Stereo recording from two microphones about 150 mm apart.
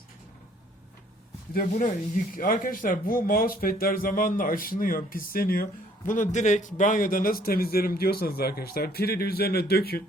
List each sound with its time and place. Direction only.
1.5 s speech: 70° left (ahead or behind)
6.1 s a man's voice: 55° left (ahead or behind); by 10.0 s 90° left